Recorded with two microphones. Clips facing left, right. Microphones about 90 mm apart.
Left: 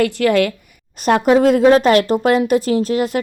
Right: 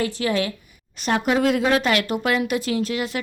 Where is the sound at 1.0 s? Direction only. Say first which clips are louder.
Left 8 dB; 45° left (ahead or behind).